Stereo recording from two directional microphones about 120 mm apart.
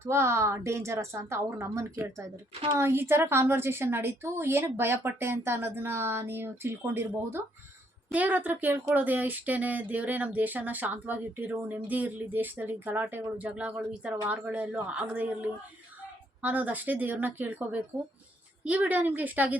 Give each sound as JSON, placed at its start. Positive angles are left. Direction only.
{"t": 0.0, "sound": "a woman's voice", "side_deg": -20}